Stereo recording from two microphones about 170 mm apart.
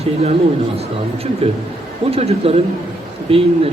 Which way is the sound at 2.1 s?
35° right (ahead or behind).